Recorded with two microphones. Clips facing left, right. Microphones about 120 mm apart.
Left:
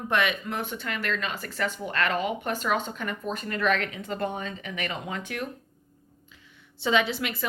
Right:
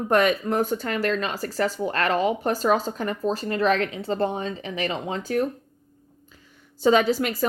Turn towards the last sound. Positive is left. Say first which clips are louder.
# right 7 dB
turn(degrees=-40)  # may be behind; listen again after turning